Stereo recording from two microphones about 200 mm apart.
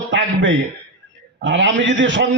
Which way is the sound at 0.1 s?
65° right (ahead or behind).